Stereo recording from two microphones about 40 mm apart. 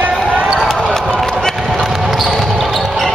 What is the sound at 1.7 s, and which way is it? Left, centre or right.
Basketball bounce, centre.